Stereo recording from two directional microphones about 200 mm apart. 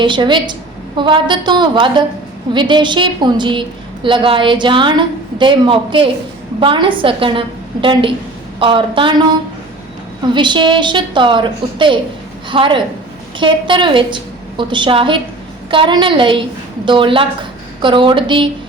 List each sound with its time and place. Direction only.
0.0 s a woman's voice: 25° right (ahead or behind)
10.3 s a woman's voice: 25° right (ahead or behind)